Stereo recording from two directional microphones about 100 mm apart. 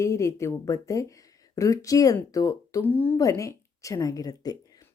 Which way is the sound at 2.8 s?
20° left (ahead or behind).